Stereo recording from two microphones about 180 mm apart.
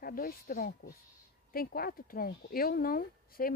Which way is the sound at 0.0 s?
55° left (ahead or behind).